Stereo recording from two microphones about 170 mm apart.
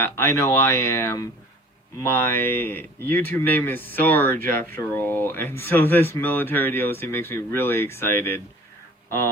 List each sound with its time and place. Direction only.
0.0 s speech: 15° left (ahead or behind)